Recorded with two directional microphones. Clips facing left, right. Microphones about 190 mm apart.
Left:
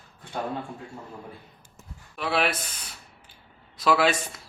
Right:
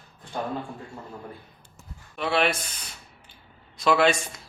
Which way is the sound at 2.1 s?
5° left (ahead or behind).